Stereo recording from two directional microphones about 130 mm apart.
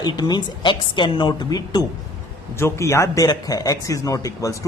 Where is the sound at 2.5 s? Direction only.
20° left (ahead or behind).